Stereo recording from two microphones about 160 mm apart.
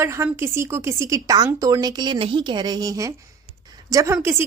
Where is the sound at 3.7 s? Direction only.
20° right (ahead or behind).